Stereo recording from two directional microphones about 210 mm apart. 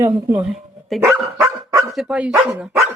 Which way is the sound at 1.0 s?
15° right (ahead or behind).